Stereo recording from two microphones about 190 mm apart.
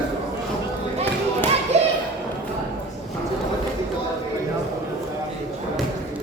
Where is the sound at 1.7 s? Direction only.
35° right (ahead or behind).